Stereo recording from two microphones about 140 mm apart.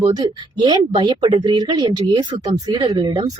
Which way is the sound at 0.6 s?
35° right (ahead or behind).